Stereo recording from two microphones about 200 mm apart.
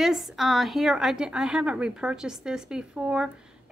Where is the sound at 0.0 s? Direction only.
Centre (ahead or behind).